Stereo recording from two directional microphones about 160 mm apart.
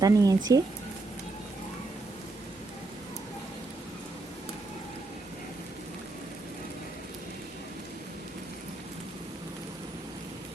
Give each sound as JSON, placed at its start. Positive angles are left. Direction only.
{"t": 0.0, "sound": "speech", "side_deg": -20}